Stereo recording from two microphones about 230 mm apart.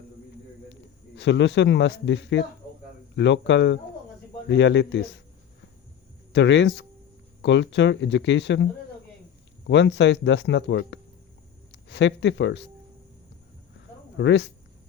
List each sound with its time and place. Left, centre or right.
0.7 s a man's voice: left
6.3 s speech: left
9.6 s speech: left
14.2 s speech: left